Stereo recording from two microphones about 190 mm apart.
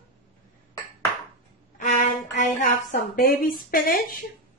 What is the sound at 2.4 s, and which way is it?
Speech, 45° left (ahead or behind).